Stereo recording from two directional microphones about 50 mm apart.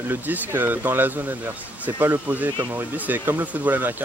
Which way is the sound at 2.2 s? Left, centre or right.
Right.